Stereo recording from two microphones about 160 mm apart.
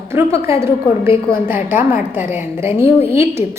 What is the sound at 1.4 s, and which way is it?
A woman's voice, 10° right (ahead or behind).